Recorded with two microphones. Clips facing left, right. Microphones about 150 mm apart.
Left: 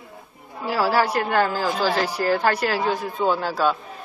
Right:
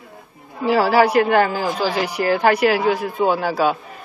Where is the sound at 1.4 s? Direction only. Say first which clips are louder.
Right 3 dB; 15° right (ahead or behind).